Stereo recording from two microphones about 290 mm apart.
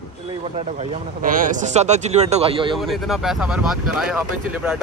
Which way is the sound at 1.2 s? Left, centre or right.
Right.